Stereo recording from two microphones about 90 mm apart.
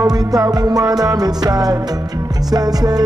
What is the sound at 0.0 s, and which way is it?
Music, 45° right (ahead or behind).